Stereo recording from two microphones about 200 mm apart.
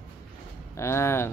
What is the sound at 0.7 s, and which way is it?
Speech, 15° left (ahead or behind).